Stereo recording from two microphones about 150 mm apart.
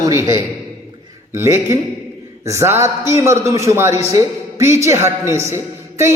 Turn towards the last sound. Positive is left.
turn(degrees=-20)  # may be behind; listen again after turning